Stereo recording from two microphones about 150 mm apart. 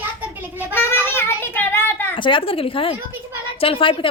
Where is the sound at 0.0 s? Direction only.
10° right (ahead or behind).